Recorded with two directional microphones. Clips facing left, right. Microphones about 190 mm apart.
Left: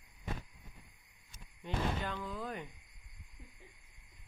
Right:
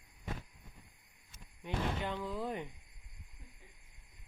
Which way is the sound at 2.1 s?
25° right (ahead or behind).